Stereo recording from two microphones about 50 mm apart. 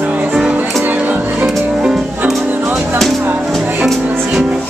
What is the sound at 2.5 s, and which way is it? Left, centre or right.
Music, right.